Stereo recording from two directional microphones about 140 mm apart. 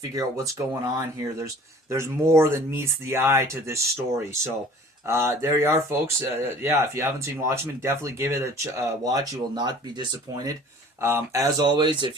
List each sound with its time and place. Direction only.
0.1 s speech: 25° right (ahead or behind)
11.0 s speech: 20° right (ahead or behind)